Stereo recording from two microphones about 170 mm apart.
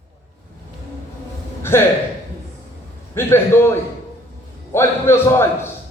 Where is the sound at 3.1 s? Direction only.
15° left (ahead or behind).